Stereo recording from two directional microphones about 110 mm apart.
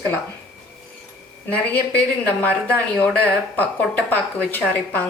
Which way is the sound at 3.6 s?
15° left (ahead or behind).